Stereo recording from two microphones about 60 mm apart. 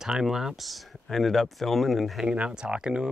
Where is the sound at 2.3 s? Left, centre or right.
Centre.